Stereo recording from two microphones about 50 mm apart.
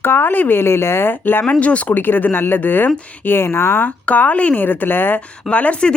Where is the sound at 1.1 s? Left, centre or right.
Left.